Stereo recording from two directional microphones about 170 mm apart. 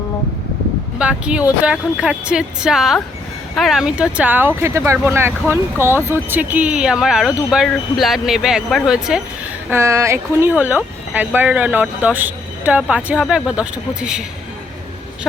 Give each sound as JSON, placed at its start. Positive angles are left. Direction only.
{"t": 0.9, "sound": "speech", "side_deg": -5}
{"t": 9.6, "sound": "speech", "side_deg": -15}